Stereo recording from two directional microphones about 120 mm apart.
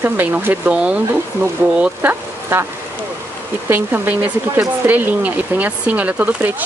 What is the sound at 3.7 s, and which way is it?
Speech, 15° right (ahead or behind).